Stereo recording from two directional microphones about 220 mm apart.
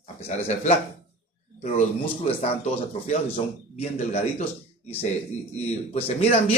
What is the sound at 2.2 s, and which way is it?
A man's voice, 25° left (ahead or behind).